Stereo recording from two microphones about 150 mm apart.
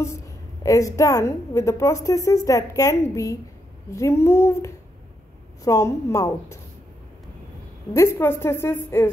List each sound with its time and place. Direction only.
0.7 s a woman's voice: 20° left (ahead or behind)
7.9 s a woman's voice: 20° left (ahead or behind)